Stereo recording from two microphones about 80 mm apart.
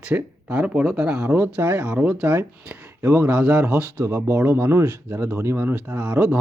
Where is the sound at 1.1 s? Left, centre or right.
Right.